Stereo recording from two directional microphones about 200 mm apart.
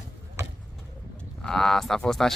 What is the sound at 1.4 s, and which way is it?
Speech, centre (ahead or behind).